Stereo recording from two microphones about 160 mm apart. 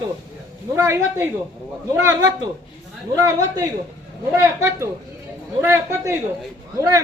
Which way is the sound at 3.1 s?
20° right (ahead or behind).